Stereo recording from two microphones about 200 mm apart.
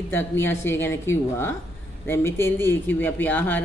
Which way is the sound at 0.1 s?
10° left (ahead or behind).